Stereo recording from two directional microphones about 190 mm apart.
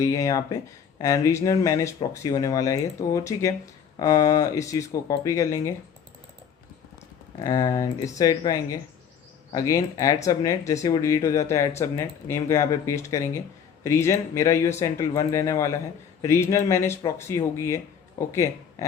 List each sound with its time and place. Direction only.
0.0 s speech: 15° left (ahead or behind)
7.4 s a man's voice: 20° left (ahead or behind)